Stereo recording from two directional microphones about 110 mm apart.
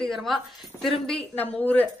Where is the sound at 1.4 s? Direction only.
15° left (ahead or behind).